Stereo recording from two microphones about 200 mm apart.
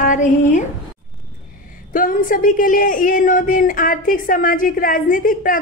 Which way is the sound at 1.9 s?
40° left (ahead or behind).